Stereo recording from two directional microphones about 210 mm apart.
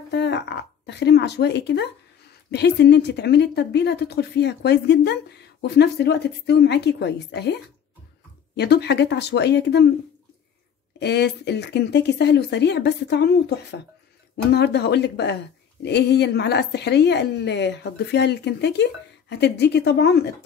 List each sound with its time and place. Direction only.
0.1 s speech: 55° left (ahead or behind)
11.0 s speech: 50° left (ahead or behind)